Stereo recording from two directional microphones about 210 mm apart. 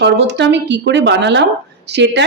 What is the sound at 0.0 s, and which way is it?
A woman's voice, 55° right (ahead or behind).